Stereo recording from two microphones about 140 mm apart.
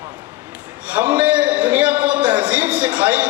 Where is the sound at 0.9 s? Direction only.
10° right (ahead or behind).